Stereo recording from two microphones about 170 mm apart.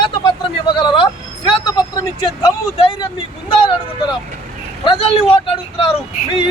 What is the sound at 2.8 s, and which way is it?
Speech, 35° left (ahead or behind).